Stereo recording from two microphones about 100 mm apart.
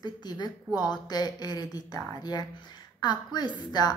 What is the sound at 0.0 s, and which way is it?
A woman's voice, 45° left (ahead or behind).